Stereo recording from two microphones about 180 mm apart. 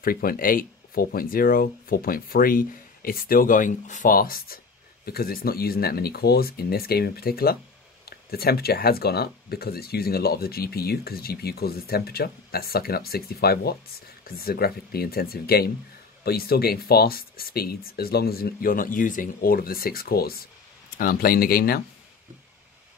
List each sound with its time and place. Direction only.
0.0 s speech: 55° left (ahead or behind)